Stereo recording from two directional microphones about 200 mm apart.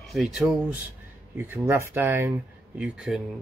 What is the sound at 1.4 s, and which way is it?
Speech, 10° right (ahead or behind).